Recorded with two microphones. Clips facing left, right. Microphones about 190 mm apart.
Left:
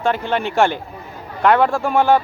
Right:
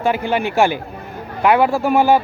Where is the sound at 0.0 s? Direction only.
10° right (ahead or behind).